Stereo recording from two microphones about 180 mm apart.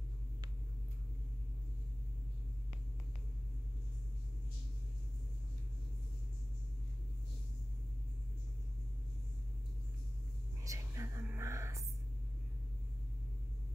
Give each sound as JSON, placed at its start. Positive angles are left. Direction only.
{"t": 10.6, "sound": "whispering", "side_deg": -15}